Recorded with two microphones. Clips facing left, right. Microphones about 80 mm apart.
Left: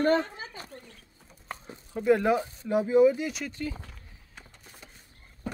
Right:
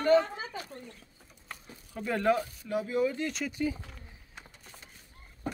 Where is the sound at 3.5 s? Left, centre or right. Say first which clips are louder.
Right 3 dB; centre.